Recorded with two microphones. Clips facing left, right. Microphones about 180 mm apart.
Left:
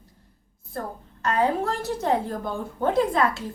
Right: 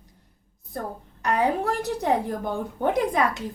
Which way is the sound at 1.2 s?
15° right (ahead or behind).